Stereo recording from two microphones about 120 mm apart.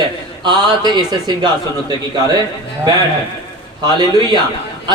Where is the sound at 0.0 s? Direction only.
35° right (ahead or behind).